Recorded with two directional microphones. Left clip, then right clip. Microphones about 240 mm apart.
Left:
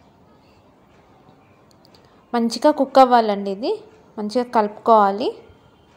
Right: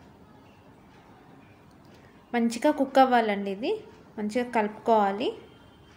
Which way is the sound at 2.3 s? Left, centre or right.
Left.